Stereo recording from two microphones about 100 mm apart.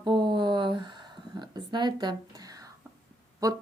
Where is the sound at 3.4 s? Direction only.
35° right (ahead or behind).